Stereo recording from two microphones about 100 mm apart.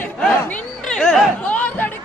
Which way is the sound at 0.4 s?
10° left (ahead or behind).